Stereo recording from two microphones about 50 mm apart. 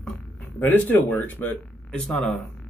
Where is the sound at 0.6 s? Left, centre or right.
Left.